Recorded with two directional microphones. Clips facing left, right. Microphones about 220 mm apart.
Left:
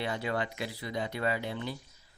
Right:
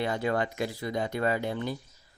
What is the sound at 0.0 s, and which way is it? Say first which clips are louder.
Speech: right 5 dB; 45° right (ahead or behind).